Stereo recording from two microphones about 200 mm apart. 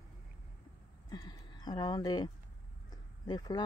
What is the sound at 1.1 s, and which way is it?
Speech, 20° left (ahead or behind).